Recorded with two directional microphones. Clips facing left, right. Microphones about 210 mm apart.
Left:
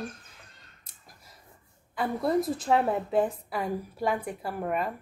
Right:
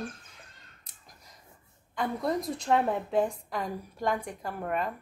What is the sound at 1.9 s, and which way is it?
A woman's voice, 5° left (ahead or behind).